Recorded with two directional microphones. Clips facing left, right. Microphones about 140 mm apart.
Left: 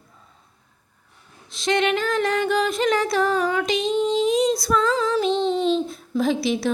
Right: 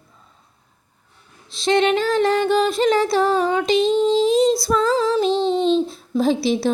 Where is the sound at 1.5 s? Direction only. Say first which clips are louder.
Right 4 dB; 30° right (ahead or behind).